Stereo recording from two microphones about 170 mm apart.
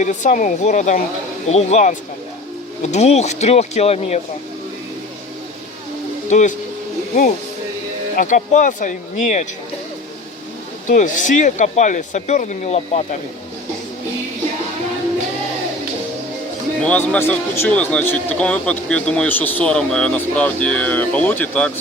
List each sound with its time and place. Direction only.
0.0 s speech: 45° left (ahead or behind)
6.2 s speech: 45° left (ahead or behind)
8.1 s speech: 50° left (ahead or behind)
10.8 s speech: 50° left (ahead or behind)
16.8 s speech: 10° left (ahead or behind)